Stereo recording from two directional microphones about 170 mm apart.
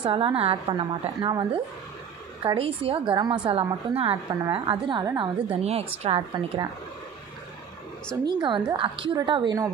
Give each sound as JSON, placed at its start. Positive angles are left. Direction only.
{"t": 0.0, "sound": "a woman's voice", "side_deg": -30}
{"t": 5.6, "sound": "a woman's voice", "side_deg": -40}
{"t": 8.3, "sound": "a woman's voice", "side_deg": -25}